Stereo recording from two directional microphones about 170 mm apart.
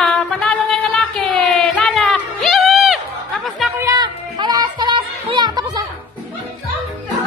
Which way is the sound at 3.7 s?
20° right (ahead or behind).